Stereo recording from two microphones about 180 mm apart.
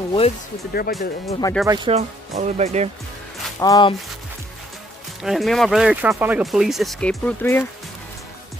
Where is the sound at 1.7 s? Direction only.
30° right (ahead or behind).